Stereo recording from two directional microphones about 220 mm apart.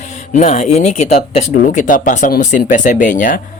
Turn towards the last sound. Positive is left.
turn(degrees=35)  # may be behind; listen again after turning